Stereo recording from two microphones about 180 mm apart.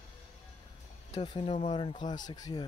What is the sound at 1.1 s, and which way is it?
Speech, 30° left (ahead or behind).